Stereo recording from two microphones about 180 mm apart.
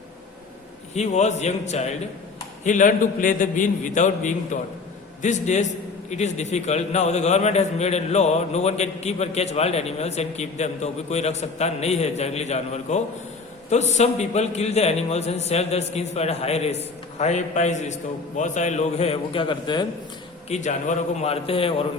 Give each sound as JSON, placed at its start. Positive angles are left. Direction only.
{"t": 0.9, "sound": "a man's voice", "side_deg": 40}
{"t": 20.5, "sound": "a man's voice", "side_deg": 40}